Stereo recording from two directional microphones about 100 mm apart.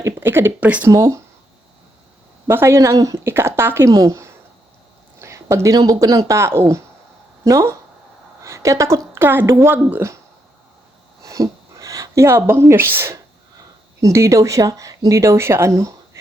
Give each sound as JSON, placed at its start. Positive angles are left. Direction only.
{"t": 0.0, "sound": "speech", "side_deg": -25}
{"t": 2.5, "sound": "speech", "side_deg": -25}
{"t": 3.9, "sound": "speech", "side_deg": -35}
{"t": 8.4, "sound": "speech", "side_deg": -30}
{"t": 11.3, "sound": "speech", "side_deg": -35}